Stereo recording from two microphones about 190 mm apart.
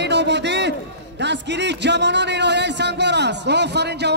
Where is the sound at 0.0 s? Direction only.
65° right (ahead or behind).